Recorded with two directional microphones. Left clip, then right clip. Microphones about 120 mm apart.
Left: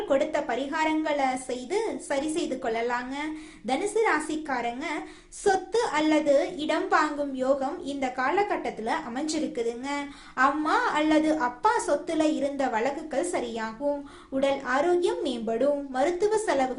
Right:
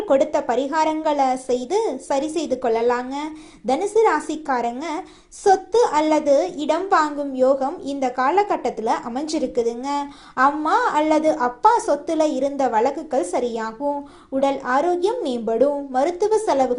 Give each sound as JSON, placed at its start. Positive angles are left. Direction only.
{"t": 0.1, "sound": "a woman's voice", "side_deg": -40}